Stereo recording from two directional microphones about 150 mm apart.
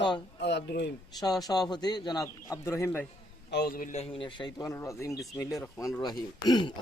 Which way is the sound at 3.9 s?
40° left (ahead or behind).